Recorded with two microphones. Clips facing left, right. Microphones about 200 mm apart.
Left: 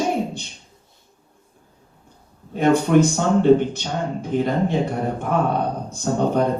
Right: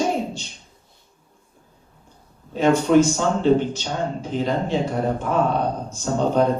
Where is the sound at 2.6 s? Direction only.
55° left (ahead or behind).